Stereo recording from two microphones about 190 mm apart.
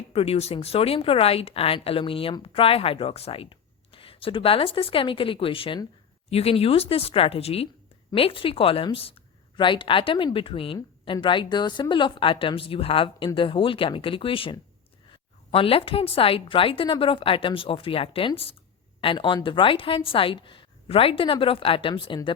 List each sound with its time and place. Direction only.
0.1 s a woman's voice: 30° left (ahead or behind)